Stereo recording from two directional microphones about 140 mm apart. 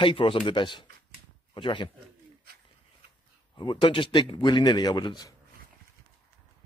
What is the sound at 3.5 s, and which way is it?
Speech, 35° left (ahead or behind).